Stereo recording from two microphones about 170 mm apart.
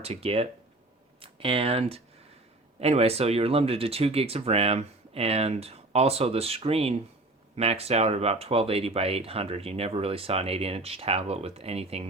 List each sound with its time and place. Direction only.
0.0 s speech: 35° right (ahead or behind)